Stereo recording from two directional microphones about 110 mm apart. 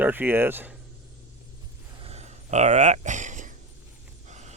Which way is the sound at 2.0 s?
80° right.